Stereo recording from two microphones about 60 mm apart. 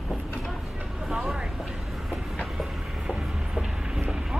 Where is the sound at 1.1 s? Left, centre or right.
Centre.